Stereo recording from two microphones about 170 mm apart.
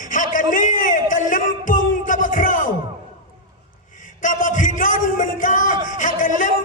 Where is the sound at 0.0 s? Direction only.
50° left (ahead or behind).